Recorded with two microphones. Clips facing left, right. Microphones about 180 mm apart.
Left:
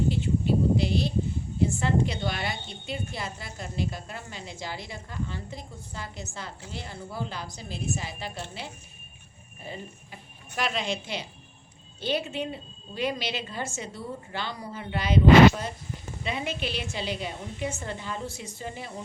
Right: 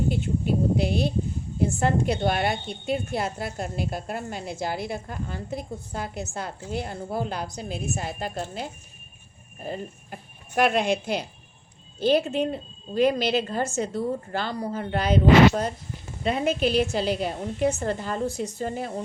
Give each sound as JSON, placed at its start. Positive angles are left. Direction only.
{"t": 0.1, "sound": "a woman's voice", "side_deg": -55}
{"t": 12.0, "sound": "speech", "side_deg": -40}